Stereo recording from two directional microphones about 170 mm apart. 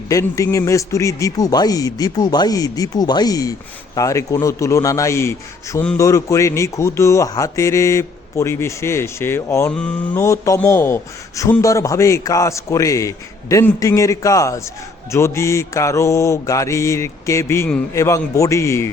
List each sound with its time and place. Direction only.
0.1 s a man's voice: 20° left (ahead or behind)
9.7 s mantra: 5° left (ahead or behind)
10.2 s a man's voice: 15° left (ahead or behind)